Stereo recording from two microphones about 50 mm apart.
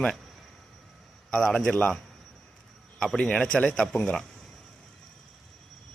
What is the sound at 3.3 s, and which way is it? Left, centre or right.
Speech, centre.